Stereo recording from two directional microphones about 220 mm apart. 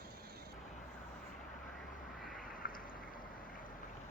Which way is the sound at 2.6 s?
40° left (ahead or behind).